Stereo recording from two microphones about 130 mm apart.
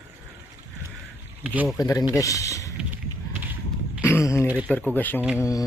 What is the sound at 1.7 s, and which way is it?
Speech, 25° left (ahead or behind).